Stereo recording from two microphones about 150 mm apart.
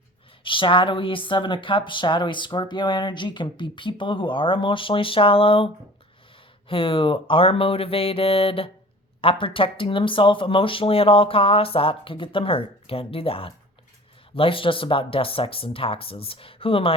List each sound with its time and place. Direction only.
0.4 s speech: 35° left (ahead or behind)